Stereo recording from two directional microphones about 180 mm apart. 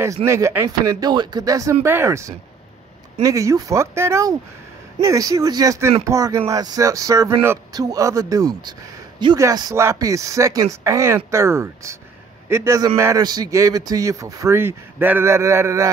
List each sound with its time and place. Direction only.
0.0 s a man's voice: 15° right (ahead or behind)